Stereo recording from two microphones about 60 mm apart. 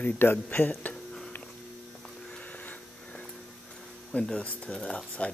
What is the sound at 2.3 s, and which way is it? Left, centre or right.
Vacuum cleaner, left.